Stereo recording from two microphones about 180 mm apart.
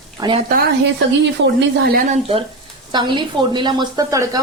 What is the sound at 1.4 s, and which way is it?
Speech, 80° right.